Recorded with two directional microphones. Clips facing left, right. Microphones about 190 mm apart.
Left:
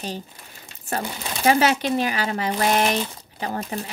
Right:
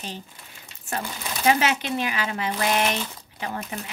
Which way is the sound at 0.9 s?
35° left (ahead or behind).